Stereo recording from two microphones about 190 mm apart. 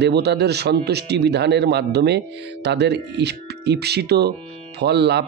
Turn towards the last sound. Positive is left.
turn(degrees=-60)  # may be behind; listen again after turning